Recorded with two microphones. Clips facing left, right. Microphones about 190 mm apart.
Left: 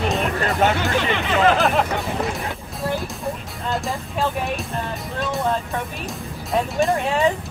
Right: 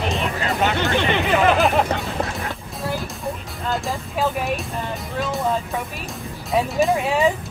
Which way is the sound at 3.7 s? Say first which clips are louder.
Even; centre (ahead or behind).